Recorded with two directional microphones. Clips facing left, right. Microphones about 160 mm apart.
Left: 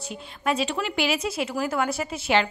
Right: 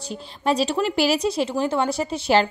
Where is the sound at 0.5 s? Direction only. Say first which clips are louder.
Right 5 dB; 35° right (ahead or behind).